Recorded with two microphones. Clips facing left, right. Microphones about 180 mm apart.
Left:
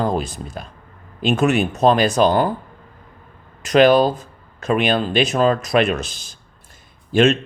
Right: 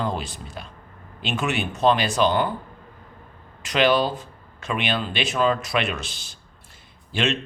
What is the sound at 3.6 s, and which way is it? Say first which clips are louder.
A man's voice: left 7 dB; 45° left (ahead or behind).